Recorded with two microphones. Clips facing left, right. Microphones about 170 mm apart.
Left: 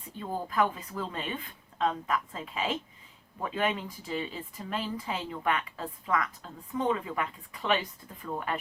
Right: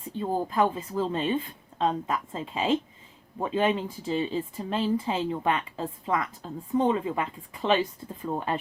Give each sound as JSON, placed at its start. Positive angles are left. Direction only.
{"t": 0.2, "sound": "speech", "side_deg": -30}